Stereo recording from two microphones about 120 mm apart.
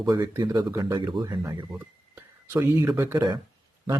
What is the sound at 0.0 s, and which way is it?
Speech, 30° right (ahead or behind).